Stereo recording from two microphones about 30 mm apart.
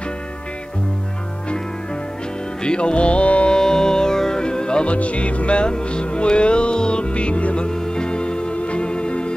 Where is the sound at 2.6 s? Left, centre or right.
Left.